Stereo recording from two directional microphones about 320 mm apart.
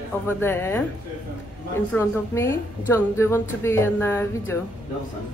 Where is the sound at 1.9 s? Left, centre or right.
Centre.